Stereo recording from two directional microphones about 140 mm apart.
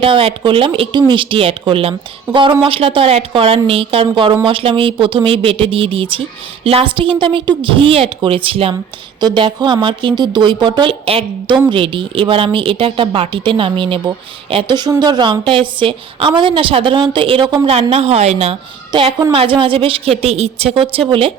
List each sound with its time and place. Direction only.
0.0 s a woman's voice: 40° right (ahead or behind)